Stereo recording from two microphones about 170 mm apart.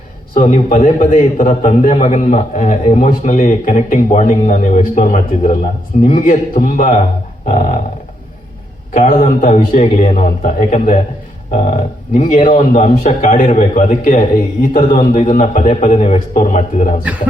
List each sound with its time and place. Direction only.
0.5 s a man's voice: 50° left (ahead or behind)
7.4 s roar: 35° left (ahead or behind)
8.9 s a man's voice: 45° left (ahead or behind)
12.1 s a man's voice: 50° left (ahead or behind)